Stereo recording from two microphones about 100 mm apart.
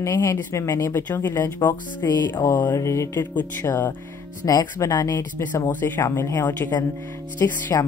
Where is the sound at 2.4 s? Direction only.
25° left (ahead or behind).